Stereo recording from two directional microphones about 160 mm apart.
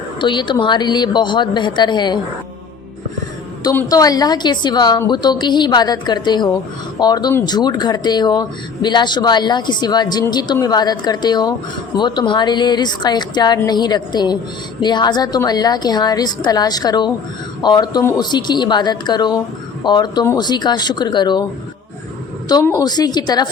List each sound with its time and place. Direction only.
0.2 s speech: 30° left (ahead or behind)
3.8 s speech: 20° left (ahead or behind)
22.8 s speech: 25° left (ahead or behind)